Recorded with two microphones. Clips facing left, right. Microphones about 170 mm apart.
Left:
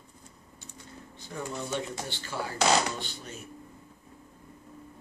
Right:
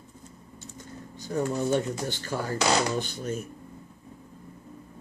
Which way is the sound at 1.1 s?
40° right (ahead or behind).